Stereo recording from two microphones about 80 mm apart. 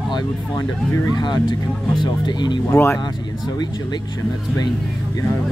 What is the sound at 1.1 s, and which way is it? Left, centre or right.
Speech, left.